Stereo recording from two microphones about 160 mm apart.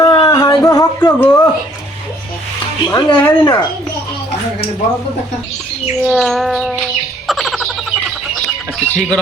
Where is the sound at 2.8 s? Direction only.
25° left (ahead or behind).